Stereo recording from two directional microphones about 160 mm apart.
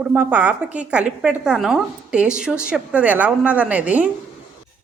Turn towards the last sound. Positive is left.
turn(degrees=-10)  # may be behind; listen again after turning